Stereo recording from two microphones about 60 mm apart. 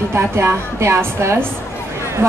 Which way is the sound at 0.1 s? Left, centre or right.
Right.